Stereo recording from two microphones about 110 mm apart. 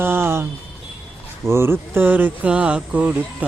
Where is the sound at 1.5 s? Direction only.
20° right (ahead or behind).